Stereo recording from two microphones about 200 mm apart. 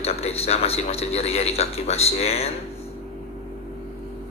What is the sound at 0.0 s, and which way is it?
A man's voice, 30° left (ahead or behind).